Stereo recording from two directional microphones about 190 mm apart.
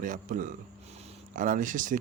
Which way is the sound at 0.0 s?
45° right (ahead or behind).